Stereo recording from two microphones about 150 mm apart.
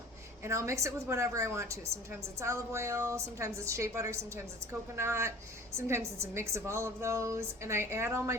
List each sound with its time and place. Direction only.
0.4 s a woman's voice: 20° right (ahead or behind)